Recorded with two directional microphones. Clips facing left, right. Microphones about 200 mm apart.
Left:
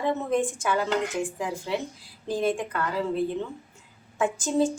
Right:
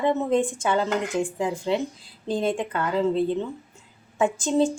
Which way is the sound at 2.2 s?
20° right (ahead or behind).